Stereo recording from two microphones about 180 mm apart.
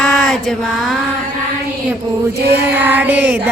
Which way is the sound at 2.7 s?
10° right (ahead or behind).